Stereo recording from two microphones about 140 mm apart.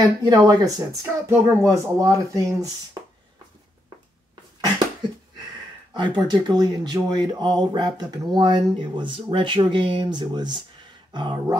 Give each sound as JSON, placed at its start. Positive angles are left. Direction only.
{"t": 0.0, "sound": "speech", "side_deg": -30}
{"t": 5.9, "sound": "speech", "side_deg": -30}